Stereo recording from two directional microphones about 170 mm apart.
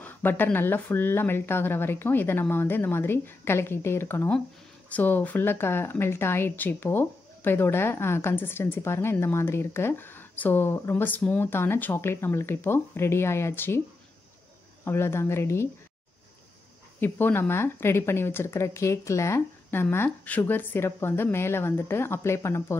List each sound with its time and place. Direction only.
0.0 s speech: 10° left (ahead or behind)
14.9 s speech: 15° left (ahead or behind)
17.0 s speech: 10° left (ahead or behind)